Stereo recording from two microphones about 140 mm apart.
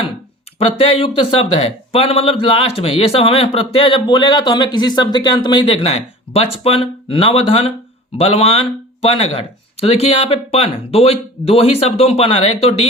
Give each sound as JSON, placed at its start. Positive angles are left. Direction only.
{"t": 0.6, "sound": "a man's voice", "side_deg": 45}